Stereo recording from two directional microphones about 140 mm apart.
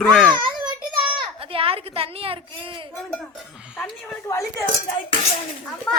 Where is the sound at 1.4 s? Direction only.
40° right (ahead or behind).